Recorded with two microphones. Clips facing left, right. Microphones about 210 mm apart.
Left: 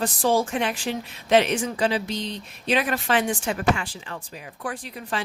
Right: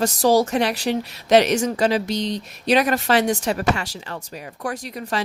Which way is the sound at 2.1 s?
90° right.